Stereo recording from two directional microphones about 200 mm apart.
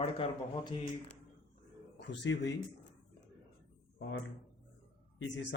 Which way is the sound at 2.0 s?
60° left (ahead or behind).